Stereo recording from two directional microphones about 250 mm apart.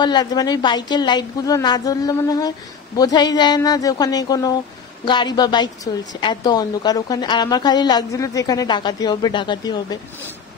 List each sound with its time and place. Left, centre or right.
0.0 s a woman's voice: centre